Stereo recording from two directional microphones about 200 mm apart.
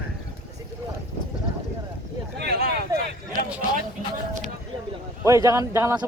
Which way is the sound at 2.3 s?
50° right (ahead or behind).